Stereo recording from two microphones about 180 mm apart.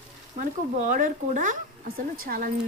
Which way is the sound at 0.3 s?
45° right (ahead or behind).